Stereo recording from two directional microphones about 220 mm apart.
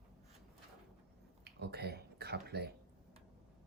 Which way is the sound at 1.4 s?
45° right (ahead or behind).